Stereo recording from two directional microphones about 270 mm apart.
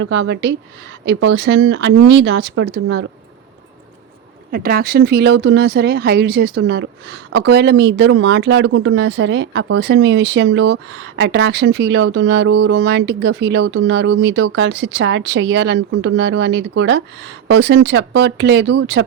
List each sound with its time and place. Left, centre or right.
0.0 s speech: right
4.5 s speech: right